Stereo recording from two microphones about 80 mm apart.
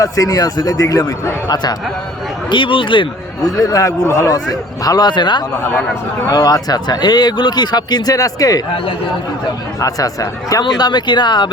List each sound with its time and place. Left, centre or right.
0.0 s a man's voice: left
2.5 s speech: left
3.4 s a man's voice: left
6.2 s speech: left
9.8 s a man's voice: left
10.6 s speech: left